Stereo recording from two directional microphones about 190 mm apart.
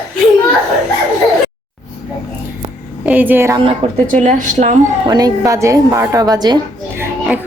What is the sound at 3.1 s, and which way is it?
Speech, 10° right (ahead or behind).